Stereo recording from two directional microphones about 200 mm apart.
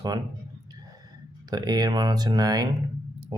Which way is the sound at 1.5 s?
20° right (ahead or behind).